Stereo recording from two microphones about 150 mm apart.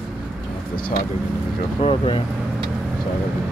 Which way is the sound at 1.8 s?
40° left (ahead or behind).